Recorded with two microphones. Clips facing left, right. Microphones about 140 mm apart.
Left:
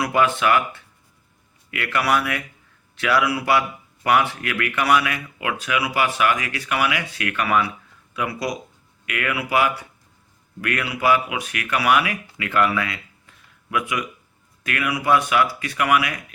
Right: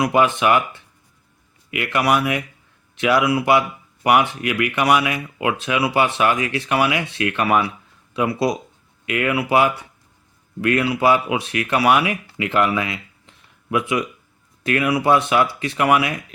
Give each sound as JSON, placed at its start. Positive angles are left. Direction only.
{"t": 0.0, "sound": "speech", "side_deg": -20}